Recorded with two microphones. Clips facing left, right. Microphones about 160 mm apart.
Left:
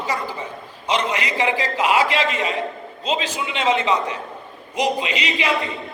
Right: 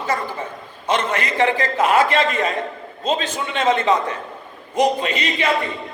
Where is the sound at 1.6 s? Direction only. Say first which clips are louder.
Right 2 dB; 45° right (ahead or behind).